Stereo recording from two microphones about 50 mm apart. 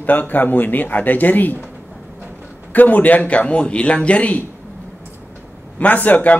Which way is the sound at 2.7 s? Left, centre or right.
Left.